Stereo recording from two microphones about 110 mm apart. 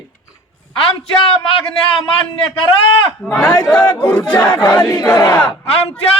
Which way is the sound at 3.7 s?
10° left (ahead or behind).